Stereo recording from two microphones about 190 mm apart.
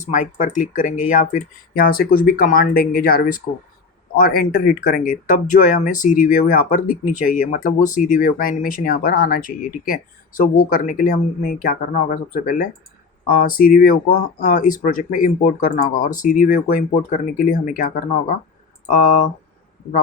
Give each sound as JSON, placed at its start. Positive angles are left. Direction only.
{"t": 0.0, "sound": "speech", "side_deg": 40}